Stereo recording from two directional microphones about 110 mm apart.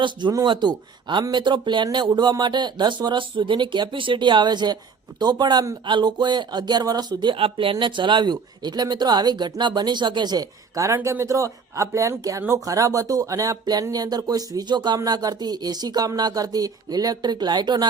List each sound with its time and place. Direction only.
0.0 s speech: 45° right (ahead or behind)